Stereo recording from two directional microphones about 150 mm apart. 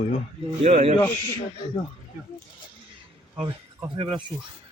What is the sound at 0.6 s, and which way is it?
Speech, 45° right (ahead or behind).